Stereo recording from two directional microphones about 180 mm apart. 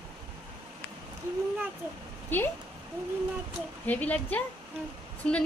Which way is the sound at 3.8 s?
10° left (ahead or behind).